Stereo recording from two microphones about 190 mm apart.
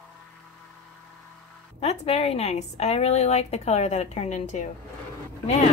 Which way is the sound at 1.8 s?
35° left (ahead or behind).